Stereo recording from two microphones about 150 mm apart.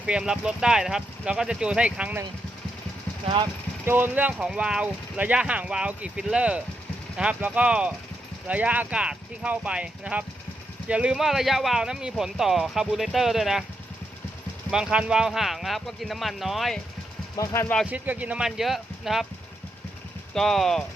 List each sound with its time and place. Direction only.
0.0 s speech: 5° right (ahead or behind)
3.2 s speech: 30° right (ahead or behind)
3.8 s speech: 15° right (ahead or behind)
14.7 s speech: 5° right (ahead or behind)
17.3 s speech: 20° left (ahead or behind)
17.9 s speech: 10° right (ahead or behind)
20.3 s speech: centre (ahead or behind)